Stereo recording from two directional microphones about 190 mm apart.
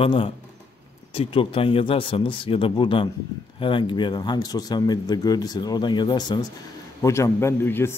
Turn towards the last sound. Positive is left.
turn(degrees=10)  # may be behind; listen again after turning